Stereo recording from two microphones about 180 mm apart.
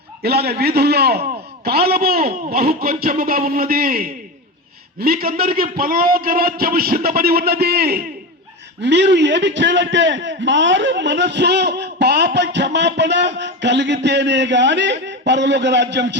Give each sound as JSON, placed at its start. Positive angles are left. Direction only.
{"t": 0.2, "sound": "a man's voice", "side_deg": -65}
{"t": 8.8, "sound": "a man's voice", "side_deg": -75}